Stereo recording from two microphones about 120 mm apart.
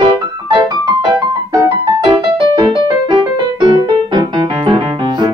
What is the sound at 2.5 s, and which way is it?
Music, 50° right (ahead or behind).